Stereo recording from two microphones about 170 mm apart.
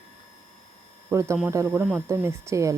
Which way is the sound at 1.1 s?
15° right (ahead or behind).